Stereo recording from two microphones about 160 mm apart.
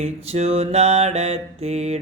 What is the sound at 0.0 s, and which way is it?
Mantra, 40° right (ahead or behind).